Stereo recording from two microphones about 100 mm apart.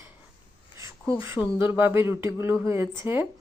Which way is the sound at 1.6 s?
20° right (ahead or behind).